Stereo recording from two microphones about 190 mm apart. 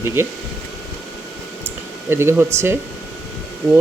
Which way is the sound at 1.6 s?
15° right (ahead or behind).